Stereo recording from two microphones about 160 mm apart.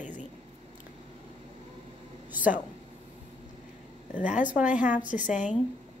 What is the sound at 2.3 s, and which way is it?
Speech, 10° right (ahead or behind).